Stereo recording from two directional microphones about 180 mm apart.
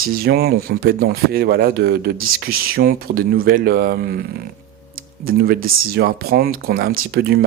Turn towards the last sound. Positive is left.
turn(degrees=-60)  # may be behind; listen again after turning